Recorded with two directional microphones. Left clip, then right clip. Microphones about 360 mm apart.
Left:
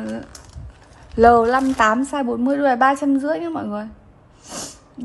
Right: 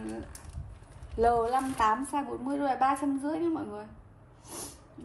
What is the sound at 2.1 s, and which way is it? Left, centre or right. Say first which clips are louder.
Speech: left 12 dB; centre.